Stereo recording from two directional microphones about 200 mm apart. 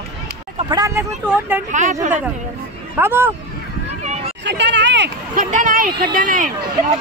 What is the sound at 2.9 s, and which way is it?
Speech, 10° right (ahead or behind).